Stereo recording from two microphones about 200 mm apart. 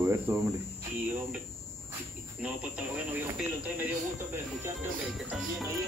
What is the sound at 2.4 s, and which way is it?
Speech, 5° right (ahead or behind).